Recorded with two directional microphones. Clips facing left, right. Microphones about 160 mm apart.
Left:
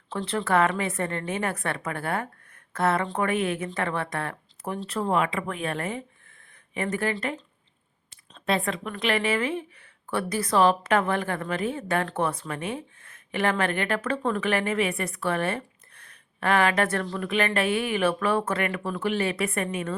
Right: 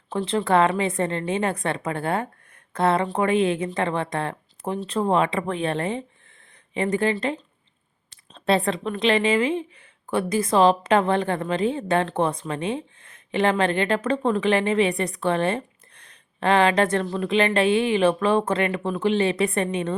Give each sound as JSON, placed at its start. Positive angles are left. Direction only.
{"t": 0.1, "sound": "speech", "side_deg": -15}